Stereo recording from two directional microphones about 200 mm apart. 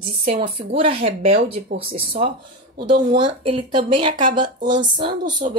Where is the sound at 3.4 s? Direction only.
25° right (ahead or behind).